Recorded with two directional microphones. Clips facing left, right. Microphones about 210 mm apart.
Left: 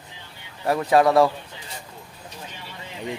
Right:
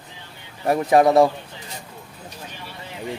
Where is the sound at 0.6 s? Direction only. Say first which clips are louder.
Right 2 dB; 20° right (ahead or behind).